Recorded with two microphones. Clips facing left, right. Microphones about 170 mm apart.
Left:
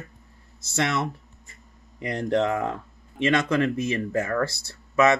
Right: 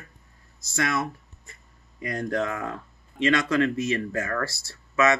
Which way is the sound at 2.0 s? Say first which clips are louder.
Left 4 dB; 25° left (ahead or behind).